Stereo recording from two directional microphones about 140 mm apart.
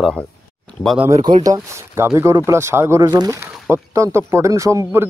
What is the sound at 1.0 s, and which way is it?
Speech, 25° right (ahead or behind).